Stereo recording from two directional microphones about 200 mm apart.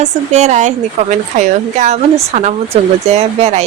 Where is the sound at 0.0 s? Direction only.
35° right (ahead or behind).